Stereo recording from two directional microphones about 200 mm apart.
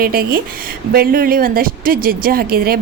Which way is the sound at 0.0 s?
50° right (ahead or behind).